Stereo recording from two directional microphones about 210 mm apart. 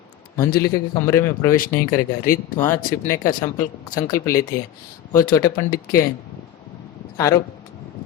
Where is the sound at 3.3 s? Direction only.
40° left (ahead or behind).